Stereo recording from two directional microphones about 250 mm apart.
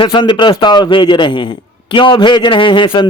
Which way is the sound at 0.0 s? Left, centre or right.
Centre.